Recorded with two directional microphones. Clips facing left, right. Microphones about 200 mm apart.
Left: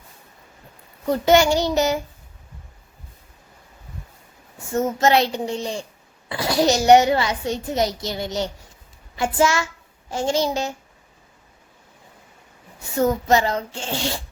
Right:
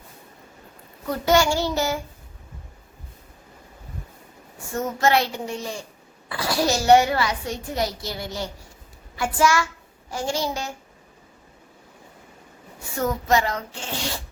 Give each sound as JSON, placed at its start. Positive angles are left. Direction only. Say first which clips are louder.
{"t": 1.0, "sound": "a child's voice", "louder": "left 4 dB", "side_deg": 20}
{"t": 4.7, "sound": "a child's voice", "louder": "left 3 dB", "side_deg": 20}
{"t": 13.0, "sound": "a child's voice", "louder": "left 4 dB", "side_deg": 30}